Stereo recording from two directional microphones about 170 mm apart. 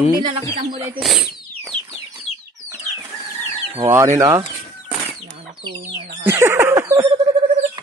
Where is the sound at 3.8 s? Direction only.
15° right (ahead or behind).